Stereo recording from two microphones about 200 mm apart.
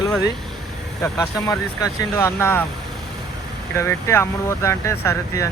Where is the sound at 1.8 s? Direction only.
15° left (ahead or behind).